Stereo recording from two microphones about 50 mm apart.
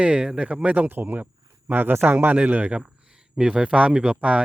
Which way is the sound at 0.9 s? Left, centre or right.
Right.